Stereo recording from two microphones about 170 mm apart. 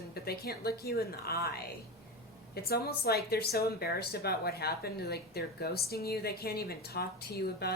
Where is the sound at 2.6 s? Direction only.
65° left (ahead or behind).